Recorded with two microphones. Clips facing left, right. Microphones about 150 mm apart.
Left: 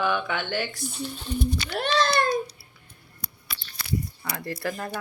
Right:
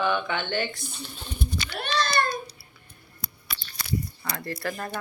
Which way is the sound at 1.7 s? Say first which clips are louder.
Left 3 dB; 90° left.